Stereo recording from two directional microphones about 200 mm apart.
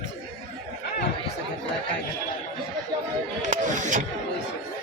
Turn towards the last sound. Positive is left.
turn(degrees=-40)  # may be behind; listen again after turning